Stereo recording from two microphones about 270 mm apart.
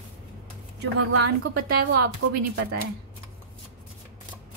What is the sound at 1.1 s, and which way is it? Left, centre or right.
Speech, right.